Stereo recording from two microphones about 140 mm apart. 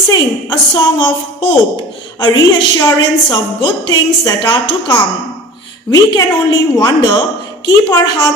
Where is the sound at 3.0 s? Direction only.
30° left (ahead or behind).